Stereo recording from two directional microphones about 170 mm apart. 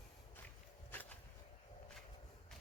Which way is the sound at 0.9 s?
10° left (ahead or behind).